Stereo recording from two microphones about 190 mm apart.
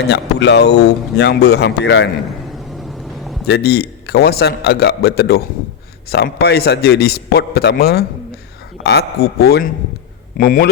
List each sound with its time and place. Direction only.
0.0 s a man's voice: 65° left (ahead or behind)
3.4 s a man's voice: 60° left (ahead or behind)